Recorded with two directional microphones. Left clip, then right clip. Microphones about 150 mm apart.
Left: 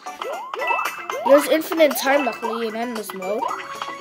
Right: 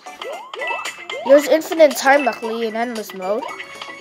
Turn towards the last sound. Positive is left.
turn(degrees=0)  # may be behind; listen again after turning